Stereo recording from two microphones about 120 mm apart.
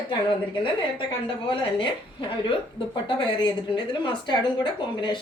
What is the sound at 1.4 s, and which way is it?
Speech, 45° left (ahead or behind).